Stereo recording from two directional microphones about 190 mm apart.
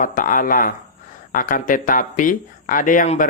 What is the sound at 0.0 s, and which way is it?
A man's voice, 45° left (ahead or behind).